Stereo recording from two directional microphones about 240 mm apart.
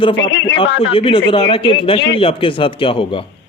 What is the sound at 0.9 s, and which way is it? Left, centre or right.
Speech, left.